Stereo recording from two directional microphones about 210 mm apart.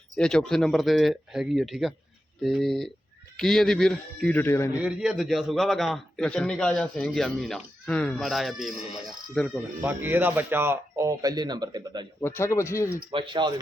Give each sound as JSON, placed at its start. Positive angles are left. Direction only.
{"t": 0.2, "sound": "a man's voice", "side_deg": 5}
{"t": 4.8, "sound": "a man's voice", "side_deg": -5}
{"t": 9.8, "sound": "a man's voice", "side_deg": -10}
{"t": 12.2, "sound": "speech", "side_deg": 15}
{"t": 13.1, "sound": "speech", "side_deg": -25}